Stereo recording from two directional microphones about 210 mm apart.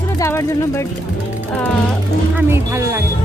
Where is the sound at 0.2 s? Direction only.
15° left (ahead or behind).